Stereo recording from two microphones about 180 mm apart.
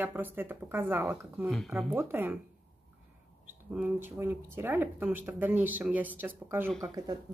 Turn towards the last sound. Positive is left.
turn(degrees=-20)  # may be behind; listen again after turning